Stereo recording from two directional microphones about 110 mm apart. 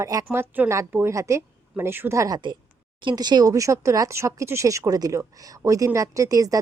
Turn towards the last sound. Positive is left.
turn(degrees=-30)  # may be behind; listen again after turning